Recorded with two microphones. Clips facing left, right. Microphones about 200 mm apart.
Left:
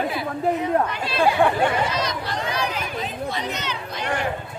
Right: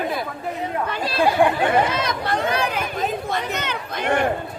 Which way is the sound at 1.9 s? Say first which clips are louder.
Right 3 dB; 55° right (ahead or behind).